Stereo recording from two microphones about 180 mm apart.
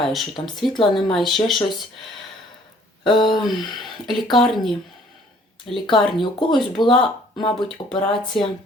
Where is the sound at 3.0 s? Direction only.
25° left (ahead or behind).